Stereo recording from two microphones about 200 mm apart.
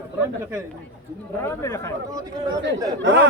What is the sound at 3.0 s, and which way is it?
Speech, 65° right (ahead or behind).